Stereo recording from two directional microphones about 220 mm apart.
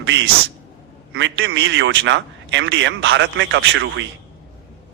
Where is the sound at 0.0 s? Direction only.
55° right (ahead or behind).